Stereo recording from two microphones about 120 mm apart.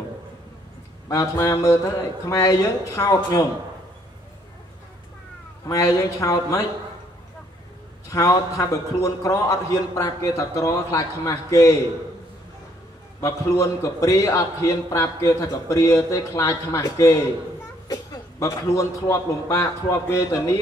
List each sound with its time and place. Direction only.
1.0 s a man's voice: 30° left (ahead or behind)
5.7 s a man's voice: 30° left (ahead or behind)
8.1 s a man's voice: 30° left (ahead or behind)
13.2 s a man's voice: 25° left (ahead or behind)